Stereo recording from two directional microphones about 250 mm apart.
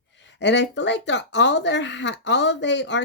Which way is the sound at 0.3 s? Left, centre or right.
Left.